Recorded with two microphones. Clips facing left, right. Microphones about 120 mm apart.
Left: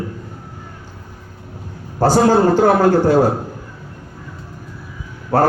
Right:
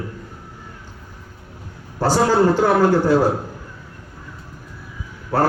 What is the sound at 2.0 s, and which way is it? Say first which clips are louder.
A man's voice: left 3 dB; 50° left (ahead or behind).